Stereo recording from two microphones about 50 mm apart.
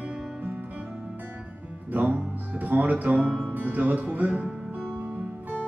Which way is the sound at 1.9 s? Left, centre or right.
Right.